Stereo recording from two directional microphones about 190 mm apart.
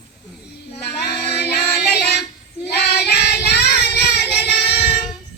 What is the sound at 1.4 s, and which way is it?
Music, 60° left (ahead or behind).